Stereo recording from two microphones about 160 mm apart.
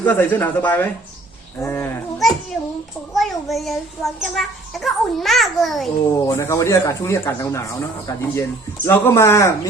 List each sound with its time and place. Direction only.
0.0 s speech: 10° left (ahead or behind)
2.1 s a child's voice: centre (ahead or behind)
6.1 s speech: 20° left (ahead or behind)